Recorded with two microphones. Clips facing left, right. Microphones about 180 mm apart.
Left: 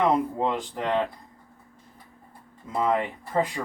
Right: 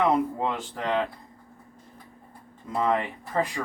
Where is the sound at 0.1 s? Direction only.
15° left (ahead or behind).